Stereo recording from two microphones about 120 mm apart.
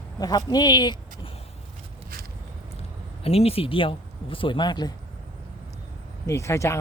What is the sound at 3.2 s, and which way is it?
Speech, 55° left (ahead or behind).